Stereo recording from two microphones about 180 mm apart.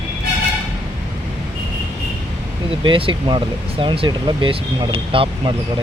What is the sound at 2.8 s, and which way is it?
Speech, 30° right (ahead or behind).